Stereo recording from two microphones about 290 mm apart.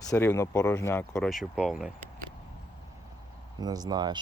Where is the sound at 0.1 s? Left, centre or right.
Centre.